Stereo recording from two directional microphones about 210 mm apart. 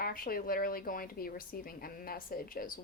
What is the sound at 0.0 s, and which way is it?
Speech, 45° left (ahead or behind).